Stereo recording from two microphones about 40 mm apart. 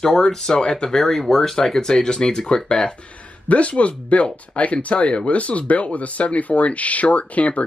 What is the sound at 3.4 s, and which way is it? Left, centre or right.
Speech, left.